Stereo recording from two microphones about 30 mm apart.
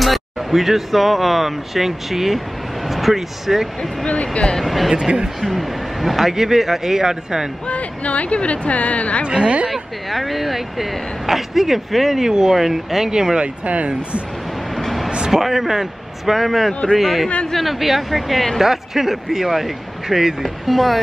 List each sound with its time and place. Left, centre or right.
0.0 s a man's voice: centre
4.1 s speech: left
4.6 s speech: centre
4.9 s speech: right
5.4 s a man's voice: centre
7.6 s speech: left
9.2 s speech: right
9.7 s speech: centre
12.2 s a man's voice: centre
13.4 s speech: right
15.0 s a sound: right
15.3 s a man's voice: centre
20.4 s speech: centre